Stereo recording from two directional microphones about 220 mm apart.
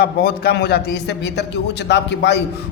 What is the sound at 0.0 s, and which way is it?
A man's voice, 45° left (ahead or behind).